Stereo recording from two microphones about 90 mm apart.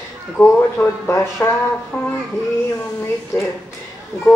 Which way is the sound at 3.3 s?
35° left (ahead or behind).